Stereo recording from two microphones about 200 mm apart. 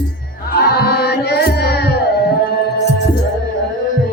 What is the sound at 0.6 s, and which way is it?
Carnatic music, 50° left (ahead or behind).